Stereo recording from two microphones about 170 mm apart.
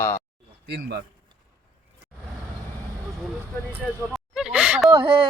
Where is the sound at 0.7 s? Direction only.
75° right (ahead or behind).